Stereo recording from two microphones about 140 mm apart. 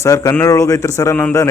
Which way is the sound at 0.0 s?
25° left (ahead or behind).